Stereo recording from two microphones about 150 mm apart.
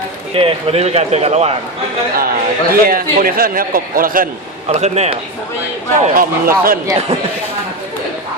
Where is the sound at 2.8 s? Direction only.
75° right (ahead or behind).